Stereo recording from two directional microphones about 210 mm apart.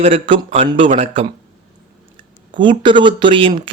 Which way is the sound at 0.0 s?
30° right (ahead or behind).